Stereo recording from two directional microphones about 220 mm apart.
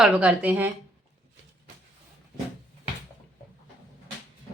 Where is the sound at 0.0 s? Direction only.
5° right (ahead or behind).